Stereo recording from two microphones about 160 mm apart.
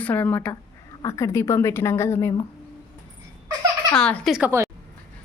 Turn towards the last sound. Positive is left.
turn(degrees=-10)  # may be behind; listen again after turning